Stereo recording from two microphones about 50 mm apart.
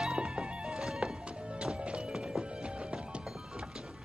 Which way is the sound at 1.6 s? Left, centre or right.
Centre.